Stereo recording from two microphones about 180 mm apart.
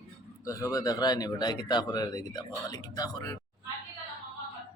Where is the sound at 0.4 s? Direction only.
20° left (ahead or behind).